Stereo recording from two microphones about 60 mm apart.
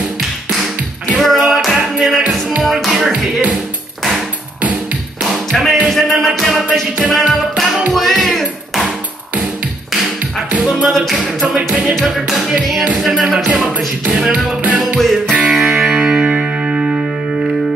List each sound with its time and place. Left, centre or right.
1.2 s tap: centre
1.7 s music: centre
5.5 s music: centre
10.6 s music: centre
10.9 s a capella: centre
11.5 s music: right
11.9 s music: centre
14.3 s music: right
15.0 s music: centre
15.3 s music: centre